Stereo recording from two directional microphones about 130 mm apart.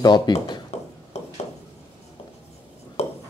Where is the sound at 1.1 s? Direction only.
55° left (ahead or behind).